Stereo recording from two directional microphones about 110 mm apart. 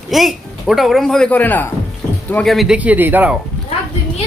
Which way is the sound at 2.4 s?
Centre (ahead or behind).